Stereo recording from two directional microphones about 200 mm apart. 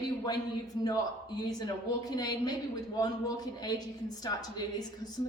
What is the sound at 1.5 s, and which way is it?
A woman's voice, 20° left (ahead or behind).